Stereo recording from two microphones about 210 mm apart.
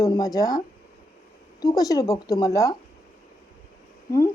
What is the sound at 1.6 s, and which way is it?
Speech, 15° left (ahead or behind).